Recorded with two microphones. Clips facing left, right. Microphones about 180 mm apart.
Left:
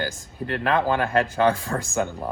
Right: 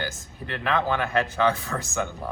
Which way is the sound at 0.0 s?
40° left (ahead or behind).